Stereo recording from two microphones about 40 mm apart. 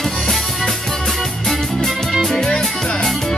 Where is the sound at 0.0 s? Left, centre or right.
Centre.